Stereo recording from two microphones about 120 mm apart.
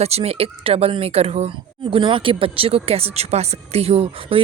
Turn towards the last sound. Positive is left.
turn(degrees=-50)  # may be behind; listen again after turning